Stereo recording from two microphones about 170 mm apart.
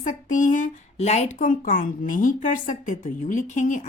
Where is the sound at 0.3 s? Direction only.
50° left (ahead or behind).